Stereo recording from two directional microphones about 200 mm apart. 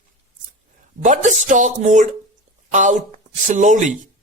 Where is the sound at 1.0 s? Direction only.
40° right (ahead or behind).